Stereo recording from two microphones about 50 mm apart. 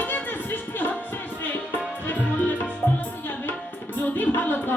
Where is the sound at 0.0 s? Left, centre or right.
Left.